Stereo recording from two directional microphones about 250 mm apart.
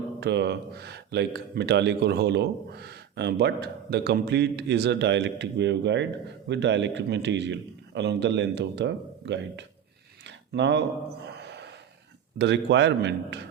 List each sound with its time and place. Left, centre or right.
0.2 s a man's voice: right
10.2 s a sound: right
12.4 s a man's voice: right